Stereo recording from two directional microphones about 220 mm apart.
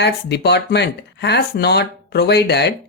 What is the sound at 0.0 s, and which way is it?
Speech, 50° left (ahead or behind).